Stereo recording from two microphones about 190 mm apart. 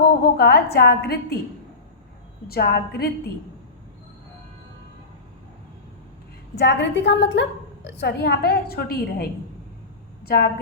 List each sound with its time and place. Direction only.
0.0 s a woman's voice: 55° left (ahead or behind)
2.5 s a woman's voice: 55° left (ahead or behind)
6.6 s a woman's voice: 65° left (ahead or behind)